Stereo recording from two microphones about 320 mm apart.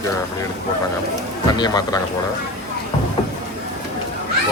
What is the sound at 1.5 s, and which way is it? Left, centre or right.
Speech, centre.